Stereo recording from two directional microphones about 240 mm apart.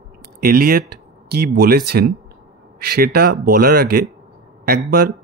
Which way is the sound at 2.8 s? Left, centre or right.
Right.